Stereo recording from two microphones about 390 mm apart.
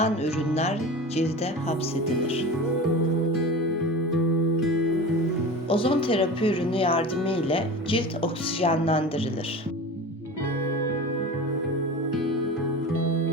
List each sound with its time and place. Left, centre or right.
0.0 s speech: centre
5.6 s speech: centre